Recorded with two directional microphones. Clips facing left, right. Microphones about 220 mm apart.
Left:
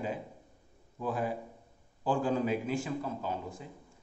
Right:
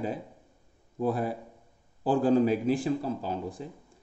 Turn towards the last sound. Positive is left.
turn(degrees=-35)  # may be behind; listen again after turning